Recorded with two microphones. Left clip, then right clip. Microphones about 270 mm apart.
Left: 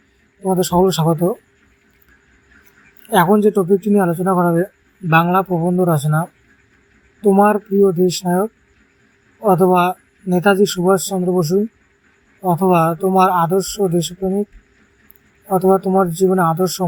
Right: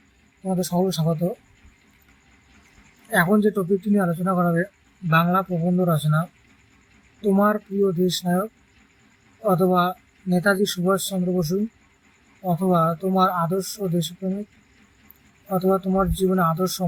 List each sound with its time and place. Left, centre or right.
0.4 s speech: centre
3.1 s speech: centre
15.4 s speech: centre